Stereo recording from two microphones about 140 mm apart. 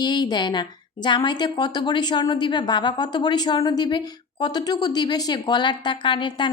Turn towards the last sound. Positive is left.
turn(degrees=35)  # may be behind; listen again after turning